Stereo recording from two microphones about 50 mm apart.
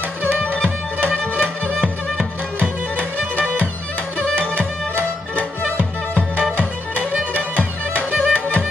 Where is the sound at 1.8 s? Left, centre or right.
Right.